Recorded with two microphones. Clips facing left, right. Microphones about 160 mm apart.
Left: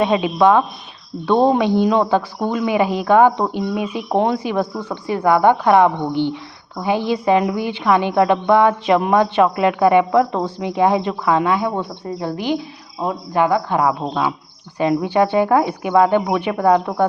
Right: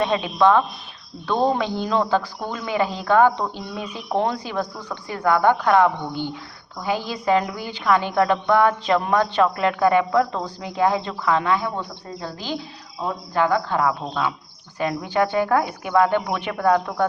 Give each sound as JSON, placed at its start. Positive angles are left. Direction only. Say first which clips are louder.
{"t": 0.0, "sound": "a woman's voice", "louder": "left 4 dB", "side_deg": 15}